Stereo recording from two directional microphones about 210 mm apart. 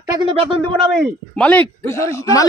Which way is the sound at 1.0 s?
5° left (ahead or behind).